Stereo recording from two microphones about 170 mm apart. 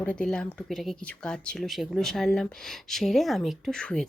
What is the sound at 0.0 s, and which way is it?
Speech, 5° left (ahead or behind).